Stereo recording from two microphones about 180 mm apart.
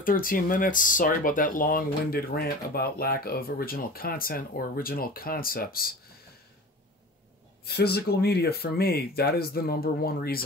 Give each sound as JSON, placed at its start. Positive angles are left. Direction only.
{"t": 0.0, "sound": "speech", "side_deg": 50}
{"t": 7.6, "sound": "speech", "side_deg": 60}